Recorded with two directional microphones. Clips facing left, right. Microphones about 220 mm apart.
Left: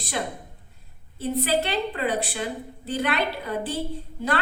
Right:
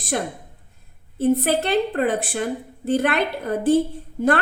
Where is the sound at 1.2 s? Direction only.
50° right (ahead or behind).